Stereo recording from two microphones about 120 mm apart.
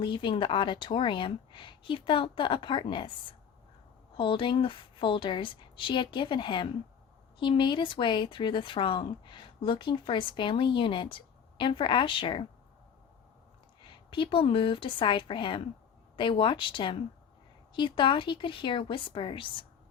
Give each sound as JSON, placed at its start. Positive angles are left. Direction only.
{"t": 0.0, "sound": "speech", "side_deg": 45}
{"t": 13.8, "sound": "speech", "side_deg": 45}